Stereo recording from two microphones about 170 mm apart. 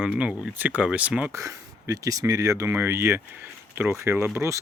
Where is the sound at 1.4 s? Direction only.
20° right (ahead or behind).